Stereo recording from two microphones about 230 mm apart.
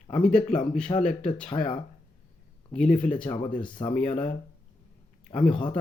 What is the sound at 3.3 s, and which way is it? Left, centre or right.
Speech, left.